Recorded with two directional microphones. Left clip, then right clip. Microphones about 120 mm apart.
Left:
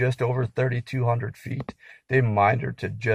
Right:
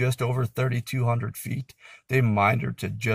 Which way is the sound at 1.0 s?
15° right (ahead or behind).